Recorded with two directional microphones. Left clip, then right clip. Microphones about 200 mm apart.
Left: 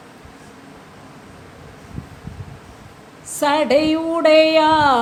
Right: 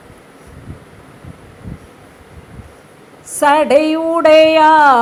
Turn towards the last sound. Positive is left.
turn(degrees=-15)  # may be behind; listen again after turning